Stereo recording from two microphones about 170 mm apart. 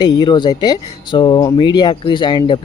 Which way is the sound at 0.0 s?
25° left (ahead or behind).